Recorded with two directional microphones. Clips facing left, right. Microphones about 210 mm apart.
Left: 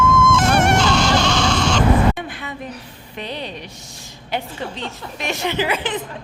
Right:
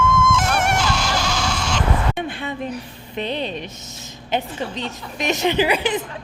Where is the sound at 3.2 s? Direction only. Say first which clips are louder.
Right 4 dB; 25° right (ahead or behind).